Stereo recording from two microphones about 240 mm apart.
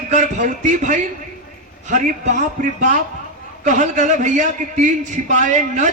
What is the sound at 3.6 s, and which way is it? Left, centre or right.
A man's voice, right.